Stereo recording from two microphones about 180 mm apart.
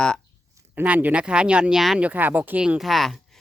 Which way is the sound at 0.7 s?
10° right (ahead or behind).